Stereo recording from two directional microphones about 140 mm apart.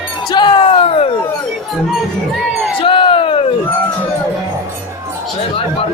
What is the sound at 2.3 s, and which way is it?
Crowd, centre (ahead or behind).